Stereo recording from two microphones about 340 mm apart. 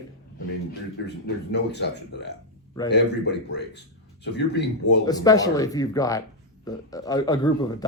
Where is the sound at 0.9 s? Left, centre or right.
Left.